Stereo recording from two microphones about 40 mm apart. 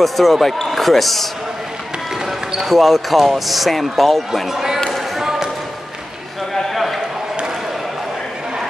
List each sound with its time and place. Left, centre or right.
0.0 s speech: centre
2.6 s speech: centre
4.5 s speech: centre
4.7 s basketball bounce: centre
5.1 s basketball bounce: centre
6.5 s a sound: centre